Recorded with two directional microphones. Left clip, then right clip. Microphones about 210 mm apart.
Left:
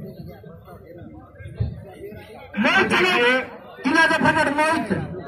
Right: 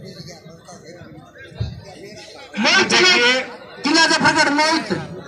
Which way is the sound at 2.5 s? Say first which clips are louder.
Right 3 dB; 15° right (ahead or behind).